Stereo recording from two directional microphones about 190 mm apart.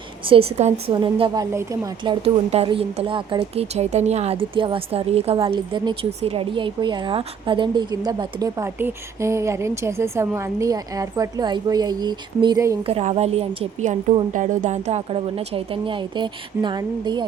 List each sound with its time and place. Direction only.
0.3 s a woman's voice: 35° right (ahead or behind); by 2.1 s 15° right (ahead or behind)
2.2 s a woman's voice: 30° right (ahead or behind)
12.8 s a woman's voice: 35° right (ahead or behind)